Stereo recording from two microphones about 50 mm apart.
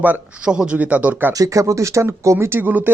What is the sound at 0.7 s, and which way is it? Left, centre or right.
Speech, right.